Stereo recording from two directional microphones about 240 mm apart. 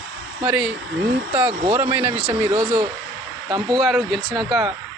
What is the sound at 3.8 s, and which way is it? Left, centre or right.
Speech, centre.